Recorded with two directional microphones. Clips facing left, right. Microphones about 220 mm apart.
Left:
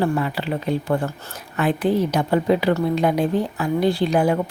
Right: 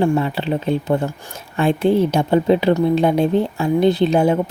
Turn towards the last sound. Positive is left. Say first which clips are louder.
# right 4 dB
turn(degrees=-25)  # may be behind; listen again after turning